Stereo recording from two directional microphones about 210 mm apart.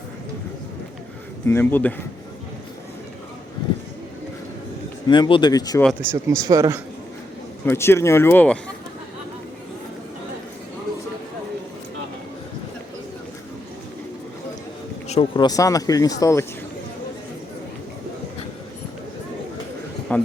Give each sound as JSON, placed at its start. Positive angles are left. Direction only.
{"t": 1.5, "sound": "speech", "side_deg": 10}
{"t": 5.0, "sound": "speech", "side_deg": 20}
{"t": 6.0, "sound": "a man's voice", "side_deg": -10}
{"t": 7.6, "sound": "speech", "side_deg": 10}
{"t": 15.0, "sound": "speech", "side_deg": 30}
{"t": 20.1, "sound": "a sound", "side_deg": 5}